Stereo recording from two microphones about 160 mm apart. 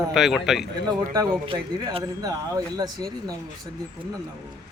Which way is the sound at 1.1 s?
25° right (ahead or behind).